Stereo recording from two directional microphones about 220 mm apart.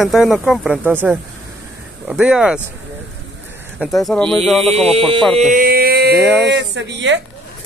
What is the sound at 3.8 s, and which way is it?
Speech, centre (ahead or behind).